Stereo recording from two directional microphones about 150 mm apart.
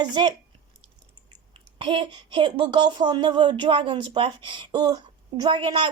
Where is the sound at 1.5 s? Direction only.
35° right (ahead or behind).